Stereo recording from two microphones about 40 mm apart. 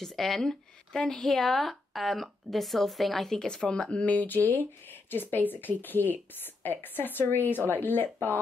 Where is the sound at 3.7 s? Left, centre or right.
Left.